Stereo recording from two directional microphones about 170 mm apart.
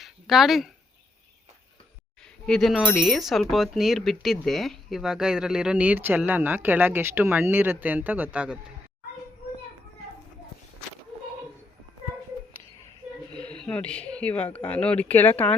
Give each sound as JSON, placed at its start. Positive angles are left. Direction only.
{"t": 0.0, "sound": "speech", "side_deg": 0}
{"t": 2.5, "sound": "speech", "side_deg": 0}
{"t": 13.3, "sound": "speech", "side_deg": 5}